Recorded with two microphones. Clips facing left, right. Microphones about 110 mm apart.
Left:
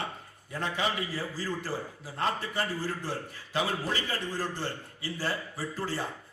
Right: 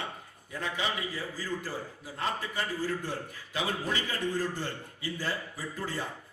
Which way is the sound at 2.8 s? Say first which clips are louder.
Right 1 dB; 30° left (ahead or behind).